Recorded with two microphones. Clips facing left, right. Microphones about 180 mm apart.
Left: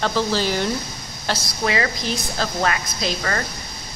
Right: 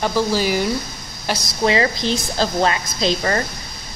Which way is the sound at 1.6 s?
25° right (ahead or behind).